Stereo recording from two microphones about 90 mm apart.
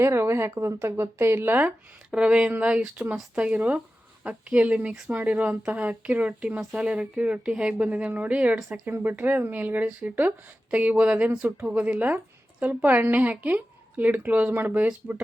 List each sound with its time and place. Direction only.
0.0 s a woman's voice: 30° right (ahead or behind)